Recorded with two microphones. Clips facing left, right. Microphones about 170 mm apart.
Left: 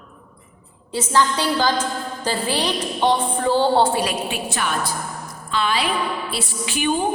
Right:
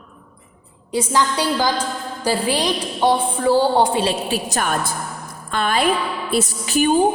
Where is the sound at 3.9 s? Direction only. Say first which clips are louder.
Right 3 dB; 30° right (ahead or behind).